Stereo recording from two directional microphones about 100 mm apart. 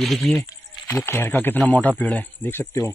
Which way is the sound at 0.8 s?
25° left (ahead or behind).